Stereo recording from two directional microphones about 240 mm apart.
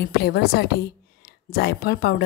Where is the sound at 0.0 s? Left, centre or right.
Left.